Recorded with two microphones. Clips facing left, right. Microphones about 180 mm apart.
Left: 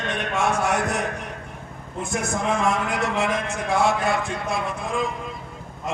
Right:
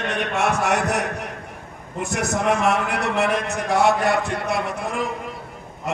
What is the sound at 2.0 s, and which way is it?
A man's voice, 70° right (ahead or behind).